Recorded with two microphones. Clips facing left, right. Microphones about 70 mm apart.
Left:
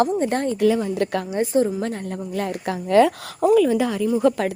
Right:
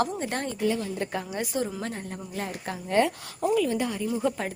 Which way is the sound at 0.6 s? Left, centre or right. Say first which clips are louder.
Left 8 dB; left.